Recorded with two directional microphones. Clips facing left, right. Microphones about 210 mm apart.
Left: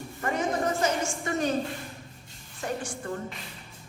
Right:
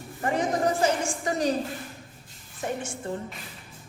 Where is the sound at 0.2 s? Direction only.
30° right (ahead or behind).